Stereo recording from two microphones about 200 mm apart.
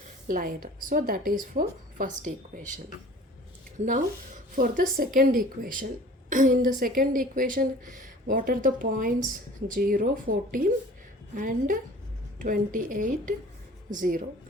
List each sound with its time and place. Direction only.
0.3 s a woman's voice: 45° right (ahead or behind)
3.8 s speech: 70° right (ahead or behind)
4.5 s a woman's voice: 40° right (ahead or behind)